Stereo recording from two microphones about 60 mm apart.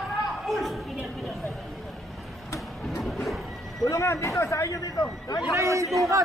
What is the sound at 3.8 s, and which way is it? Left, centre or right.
A man's voice, left.